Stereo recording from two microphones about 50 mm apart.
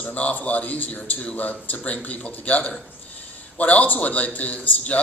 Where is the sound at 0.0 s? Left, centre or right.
Left.